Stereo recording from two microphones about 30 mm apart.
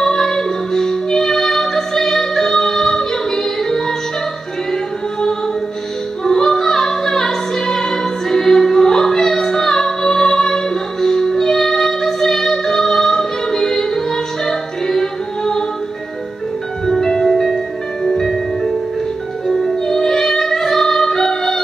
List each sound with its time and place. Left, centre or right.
0.0 s music: centre
6.2 s music: centre
16.8 s music: centre